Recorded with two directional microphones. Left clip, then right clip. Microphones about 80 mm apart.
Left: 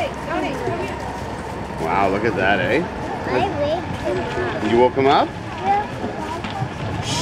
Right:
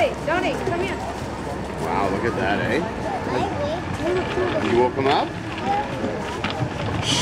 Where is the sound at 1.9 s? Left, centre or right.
Left.